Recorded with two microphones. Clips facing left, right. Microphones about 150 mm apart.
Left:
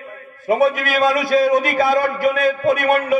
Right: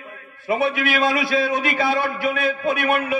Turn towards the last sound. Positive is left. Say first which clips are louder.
# left 5 dB
turn(degrees=40)  # may be behind; listen again after turning